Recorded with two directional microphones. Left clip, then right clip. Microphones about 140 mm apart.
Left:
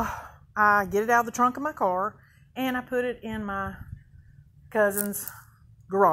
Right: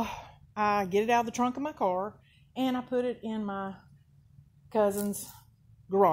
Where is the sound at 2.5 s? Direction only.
10° right (ahead or behind).